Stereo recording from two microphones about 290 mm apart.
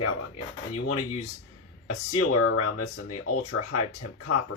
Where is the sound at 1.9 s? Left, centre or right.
Left.